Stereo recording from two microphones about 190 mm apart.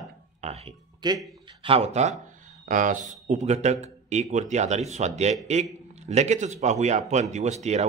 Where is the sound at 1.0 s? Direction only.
20° right (ahead or behind).